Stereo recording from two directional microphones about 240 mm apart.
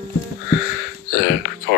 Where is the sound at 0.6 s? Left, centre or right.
Left.